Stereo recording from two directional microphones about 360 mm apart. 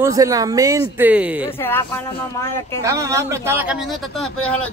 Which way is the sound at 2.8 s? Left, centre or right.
Centre.